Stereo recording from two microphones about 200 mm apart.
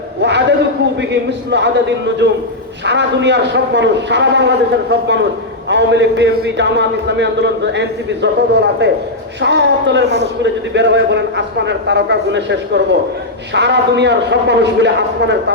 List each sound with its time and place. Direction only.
0.2 s a sound: 60° right (ahead or behind)
1.1 s a man's voice: 60° right (ahead or behind)
2.8 s a man's voice: 60° right (ahead or behind)